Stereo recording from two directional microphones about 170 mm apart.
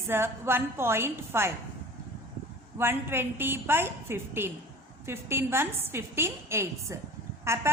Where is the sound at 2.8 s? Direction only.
15° right (ahead or behind).